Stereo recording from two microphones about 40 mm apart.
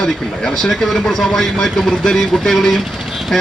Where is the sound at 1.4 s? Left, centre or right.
Centre.